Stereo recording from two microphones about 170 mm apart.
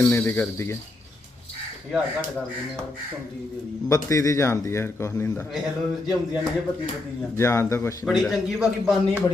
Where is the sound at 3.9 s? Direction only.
20° left (ahead or behind).